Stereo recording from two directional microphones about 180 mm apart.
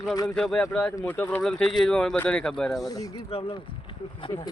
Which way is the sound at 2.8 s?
20° left (ahead or behind).